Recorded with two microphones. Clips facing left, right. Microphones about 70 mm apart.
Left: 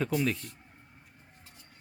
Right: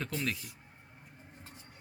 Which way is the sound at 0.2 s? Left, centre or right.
Centre.